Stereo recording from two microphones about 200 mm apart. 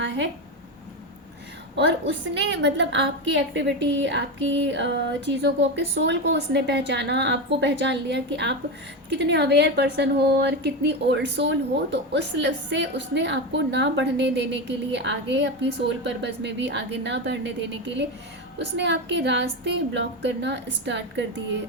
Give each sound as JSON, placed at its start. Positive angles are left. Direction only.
{"t": 1.7, "sound": "a woman's voice", "side_deg": -65}